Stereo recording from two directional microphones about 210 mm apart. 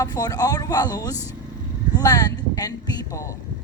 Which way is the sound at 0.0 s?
15° left (ahead or behind).